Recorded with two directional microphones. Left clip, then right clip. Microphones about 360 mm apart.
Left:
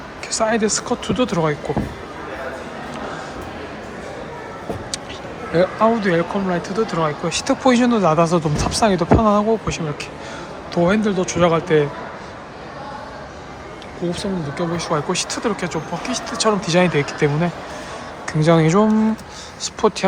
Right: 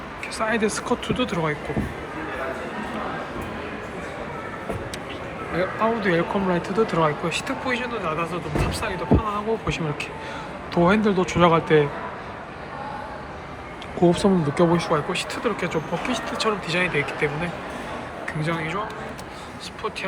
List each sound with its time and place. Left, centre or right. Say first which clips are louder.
0.3 s speech: left 5 dB; centre
5.5 s speech: left 7 dB; centre
14.1 s speech: right 4 dB; centre